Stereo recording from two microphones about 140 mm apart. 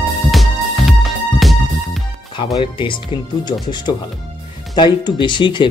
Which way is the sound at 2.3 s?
35° left (ahead or behind).